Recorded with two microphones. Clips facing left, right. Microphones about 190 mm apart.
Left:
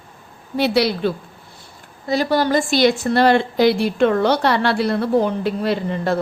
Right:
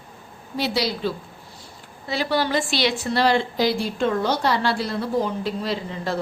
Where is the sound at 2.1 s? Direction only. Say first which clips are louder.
Left 5 dB; 45° left (ahead or behind).